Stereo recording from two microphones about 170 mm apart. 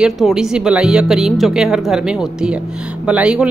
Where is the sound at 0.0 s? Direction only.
5° right (ahead or behind).